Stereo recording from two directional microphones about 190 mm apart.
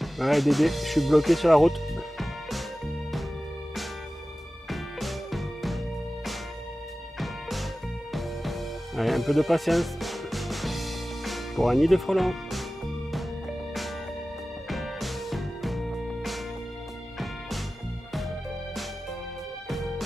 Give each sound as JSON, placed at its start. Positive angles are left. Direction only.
{"t": 0.0, "sound": "speech", "side_deg": 0}
{"t": 4.6, "sound": "music", "side_deg": 0}
{"t": 14.7, "sound": "music", "side_deg": 0}